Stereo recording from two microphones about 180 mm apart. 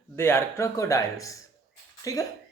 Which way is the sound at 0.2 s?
15° left (ahead or behind).